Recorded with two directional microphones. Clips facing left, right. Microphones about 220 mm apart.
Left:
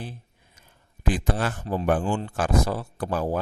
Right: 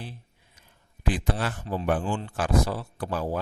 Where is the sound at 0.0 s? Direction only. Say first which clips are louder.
Left 3 dB; 45° left (ahead or behind).